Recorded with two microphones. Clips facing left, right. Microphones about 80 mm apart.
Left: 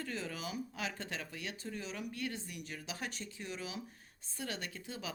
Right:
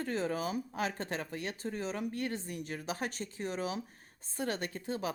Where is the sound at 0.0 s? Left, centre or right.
Right.